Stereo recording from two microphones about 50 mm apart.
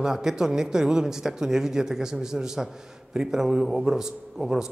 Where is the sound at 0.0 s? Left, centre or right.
Centre.